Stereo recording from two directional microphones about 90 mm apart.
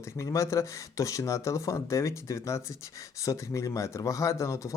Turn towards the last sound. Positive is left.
turn(degrees=35)  # may be behind; listen again after turning